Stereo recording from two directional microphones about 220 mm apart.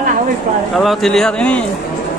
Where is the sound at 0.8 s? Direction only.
Centre (ahead or behind).